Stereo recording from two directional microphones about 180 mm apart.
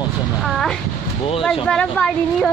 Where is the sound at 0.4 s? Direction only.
Centre (ahead or behind).